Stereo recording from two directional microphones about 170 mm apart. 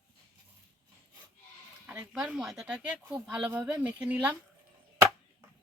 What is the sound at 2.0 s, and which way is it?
Speech, 5° right (ahead or behind).